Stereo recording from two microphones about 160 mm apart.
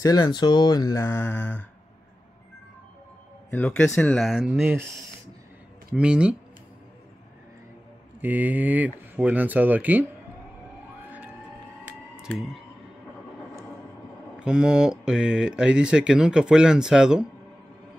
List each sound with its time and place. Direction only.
0.0 s speech: 25° left (ahead or behind)
3.4 s speech: 10° left (ahead or behind); by 4.8 s 10° right (ahead or behind)
5.9 s speech: 5° right (ahead or behind)
8.2 s speech: 10° right (ahead or behind)
12.2 s clicking: centre (ahead or behind)
14.4 s speech: 5° right (ahead or behind)